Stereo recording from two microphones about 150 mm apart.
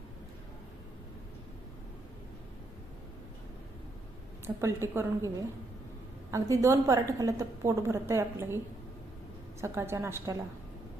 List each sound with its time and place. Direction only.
4.4 s a woman's voice: 15° right (ahead or behind)
6.3 s a woman's voice: 20° right (ahead or behind)